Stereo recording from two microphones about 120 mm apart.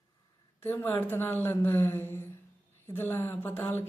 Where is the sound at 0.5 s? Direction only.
20° left (ahead or behind).